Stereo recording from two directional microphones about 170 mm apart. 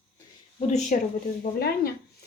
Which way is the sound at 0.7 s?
45° left (ahead or behind).